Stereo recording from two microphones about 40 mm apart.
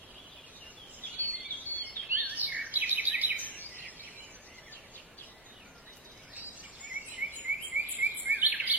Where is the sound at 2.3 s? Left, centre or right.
Right.